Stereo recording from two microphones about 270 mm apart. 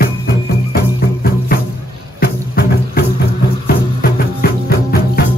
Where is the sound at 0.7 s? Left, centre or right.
Left.